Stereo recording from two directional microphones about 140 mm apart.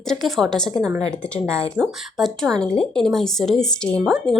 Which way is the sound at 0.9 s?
25° right (ahead or behind).